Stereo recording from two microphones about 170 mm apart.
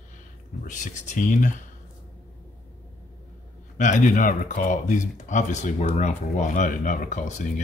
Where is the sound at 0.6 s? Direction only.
45° left (ahead or behind).